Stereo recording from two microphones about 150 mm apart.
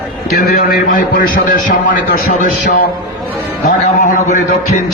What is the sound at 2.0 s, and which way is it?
Speech, 80° left.